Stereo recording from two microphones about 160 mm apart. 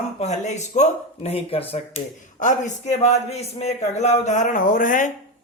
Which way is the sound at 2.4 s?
50° left (ahead or behind).